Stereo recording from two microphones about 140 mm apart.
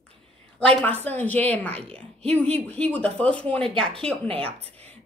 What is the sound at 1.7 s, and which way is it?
Speech, 45° right (ahead or behind).